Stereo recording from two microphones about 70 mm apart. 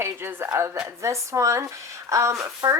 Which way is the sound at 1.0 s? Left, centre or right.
Right.